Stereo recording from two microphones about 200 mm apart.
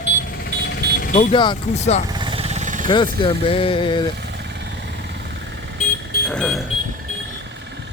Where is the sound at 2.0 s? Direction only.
20° right (ahead or behind); by 2.9 s 40° right (ahead or behind).